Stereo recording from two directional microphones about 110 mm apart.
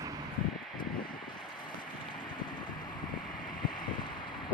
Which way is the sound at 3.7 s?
45° left (ahead or behind).